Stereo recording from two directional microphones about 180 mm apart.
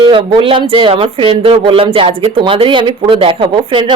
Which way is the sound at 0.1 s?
25° right (ahead or behind).